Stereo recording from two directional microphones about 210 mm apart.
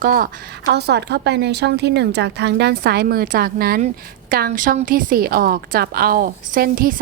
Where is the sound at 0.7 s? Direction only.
50° right (ahead or behind).